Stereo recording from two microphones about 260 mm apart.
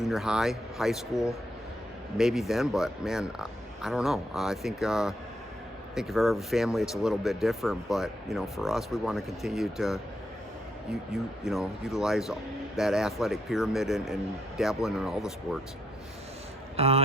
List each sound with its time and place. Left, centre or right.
0.0 s speech: centre
11.1 s speech: centre
16.7 s speech: right